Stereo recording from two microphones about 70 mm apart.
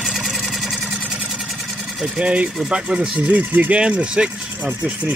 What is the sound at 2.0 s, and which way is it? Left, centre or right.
Speech, centre.